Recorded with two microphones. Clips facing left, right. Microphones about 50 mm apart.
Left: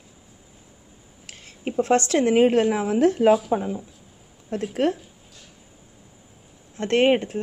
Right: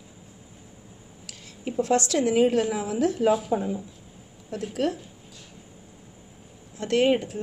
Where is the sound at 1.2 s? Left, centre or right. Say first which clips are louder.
Left 3 dB; left.